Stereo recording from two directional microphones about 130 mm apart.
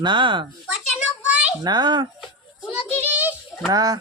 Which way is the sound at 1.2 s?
10° right (ahead or behind).